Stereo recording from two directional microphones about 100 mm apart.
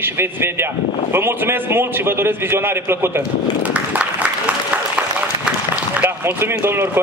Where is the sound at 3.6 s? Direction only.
15° right (ahead or behind).